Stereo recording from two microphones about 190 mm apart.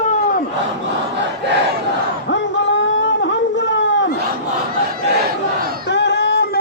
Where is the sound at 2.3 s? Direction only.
75° left (ahead or behind).